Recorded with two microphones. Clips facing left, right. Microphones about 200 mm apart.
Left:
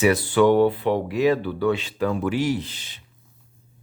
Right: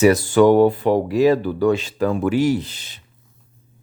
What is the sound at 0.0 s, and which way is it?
Speech, 45° right (ahead or behind).